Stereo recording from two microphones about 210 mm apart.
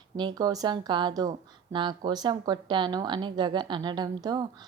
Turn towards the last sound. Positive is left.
turn(degrees=-20)  # may be behind; listen again after turning